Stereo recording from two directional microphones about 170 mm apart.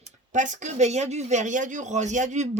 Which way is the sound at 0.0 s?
45° right (ahead or behind).